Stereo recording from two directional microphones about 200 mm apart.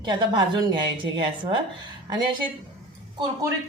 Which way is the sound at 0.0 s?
20° right (ahead or behind).